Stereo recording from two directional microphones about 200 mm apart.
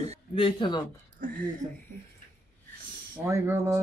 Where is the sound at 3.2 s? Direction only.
15° right (ahead or behind).